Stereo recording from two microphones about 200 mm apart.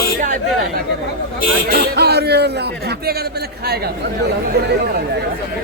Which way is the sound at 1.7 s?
55° right (ahead or behind).